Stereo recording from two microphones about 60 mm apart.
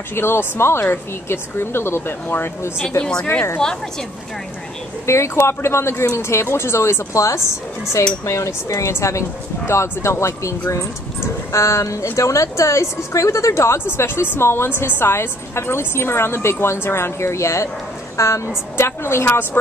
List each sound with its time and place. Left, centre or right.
0.1 s speech: left
5.0 s a woman's voice: left
11.5 s a woman's voice: left